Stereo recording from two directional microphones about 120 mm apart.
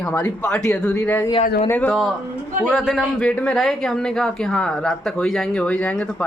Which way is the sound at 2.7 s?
Centre (ahead or behind).